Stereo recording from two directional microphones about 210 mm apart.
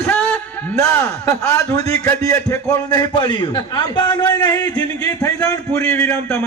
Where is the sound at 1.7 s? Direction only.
15° left (ahead or behind).